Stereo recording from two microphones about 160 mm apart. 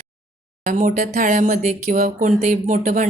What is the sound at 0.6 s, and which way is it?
Speech, 55° right (ahead or behind).